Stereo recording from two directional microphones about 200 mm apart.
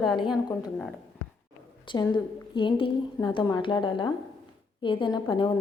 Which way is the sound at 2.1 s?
25° left (ahead or behind).